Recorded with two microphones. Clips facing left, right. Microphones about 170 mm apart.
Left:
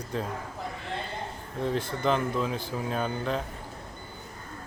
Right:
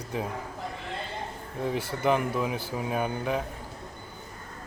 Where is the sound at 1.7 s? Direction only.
10° right (ahead or behind).